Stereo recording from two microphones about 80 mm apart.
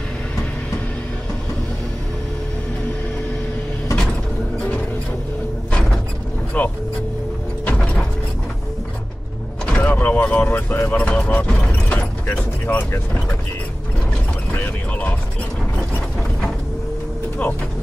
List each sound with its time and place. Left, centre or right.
5.7 s a sound: centre
6.5 s speech: centre
7.6 s music: centre
9.8 s a sound: left
12.3 s speech: left
14.5 s mechanisms: left